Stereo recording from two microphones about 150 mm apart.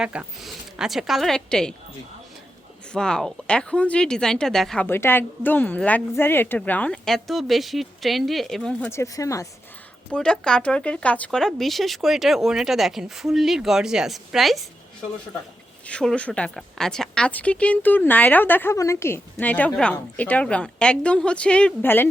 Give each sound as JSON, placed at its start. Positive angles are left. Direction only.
{"t": 0.0, "sound": "speech", "side_deg": -5}
{"t": 2.9, "sound": "speech", "side_deg": 5}
{"t": 4.9, "sound": "a woman's voice", "side_deg": 15}
{"t": 8.9, "sound": "speech", "side_deg": 20}
{"t": 10.2, "sound": "speech", "side_deg": 5}
{"t": 15.9, "sound": "a woman's voice", "side_deg": 5}